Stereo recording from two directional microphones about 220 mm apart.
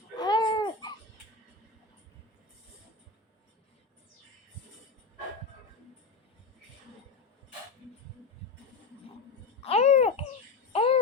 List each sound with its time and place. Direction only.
0.2 s babbling: 20° left (ahead or behind)
9.6 s babbling: 30° left (ahead or behind)
10.7 s music: 25° left (ahead or behind)